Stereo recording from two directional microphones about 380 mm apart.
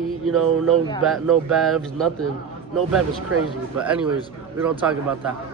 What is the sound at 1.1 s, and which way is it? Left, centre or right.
Speech, centre.